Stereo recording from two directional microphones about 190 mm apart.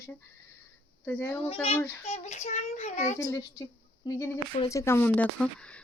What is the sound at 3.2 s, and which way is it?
Speech, 15° left (ahead or behind).